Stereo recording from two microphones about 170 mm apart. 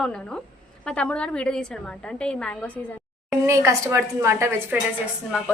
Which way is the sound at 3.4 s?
15° right (ahead or behind).